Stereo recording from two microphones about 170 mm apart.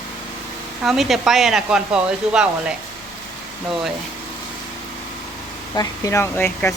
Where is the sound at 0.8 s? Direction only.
Centre (ahead or behind).